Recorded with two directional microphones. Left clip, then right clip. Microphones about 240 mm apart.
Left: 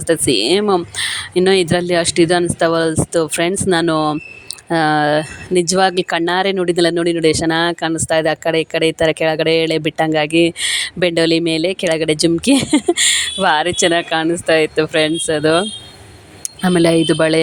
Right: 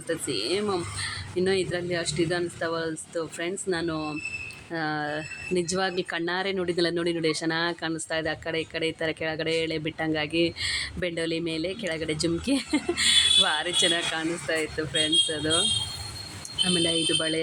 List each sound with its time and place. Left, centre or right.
0.1 s speech: left
16.6 s speech: left